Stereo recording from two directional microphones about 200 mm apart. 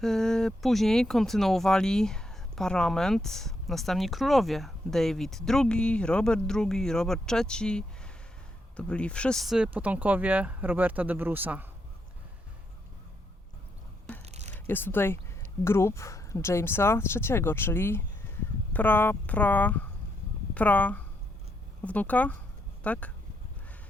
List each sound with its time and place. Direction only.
0.0 s speech: centre (ahead or behind)
14.2 s a sound: 30° right (ahead or behind)
14.5 s speech: 10° left (ahead or behind)